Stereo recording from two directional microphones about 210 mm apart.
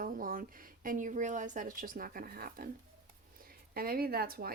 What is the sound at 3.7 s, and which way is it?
Speech, 45° right (ahead or behind).